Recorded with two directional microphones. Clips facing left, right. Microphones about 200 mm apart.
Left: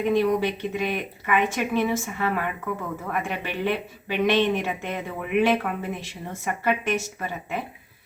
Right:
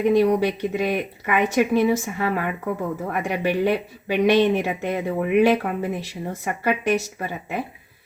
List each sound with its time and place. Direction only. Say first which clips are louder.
0.1 s speech: right 3 dB; 40° right (ahead or behind)